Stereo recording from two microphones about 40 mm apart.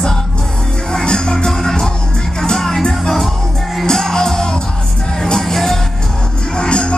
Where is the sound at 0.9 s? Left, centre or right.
Centre.